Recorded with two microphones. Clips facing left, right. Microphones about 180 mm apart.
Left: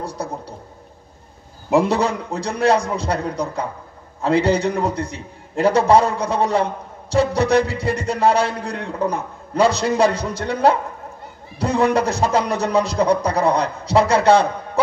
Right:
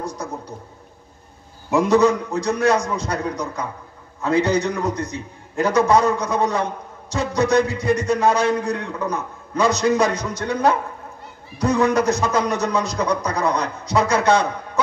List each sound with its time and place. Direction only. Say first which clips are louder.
0.0 s a man's voice: left 1 dB; 30° left (ahead or behind)
1.7 s a man's voice: right 2 dB; 30° left (ahead or behind)